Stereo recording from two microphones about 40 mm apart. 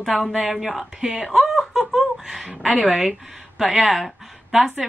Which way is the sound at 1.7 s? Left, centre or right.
Centre.